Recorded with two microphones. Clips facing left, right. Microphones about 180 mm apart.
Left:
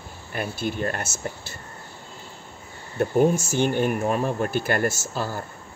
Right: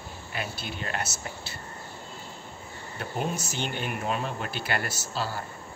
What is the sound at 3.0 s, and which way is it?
Speech, 45° left (ahead or behind).